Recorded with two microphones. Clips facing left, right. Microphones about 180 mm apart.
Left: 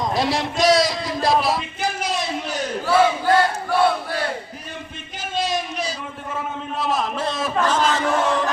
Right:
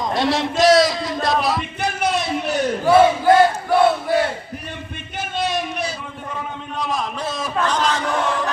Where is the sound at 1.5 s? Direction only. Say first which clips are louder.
Right 1 dB; 60° right (ahead or behind).